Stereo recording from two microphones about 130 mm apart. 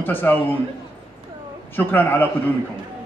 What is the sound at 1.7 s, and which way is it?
Speech, 15° left (ahead or behind).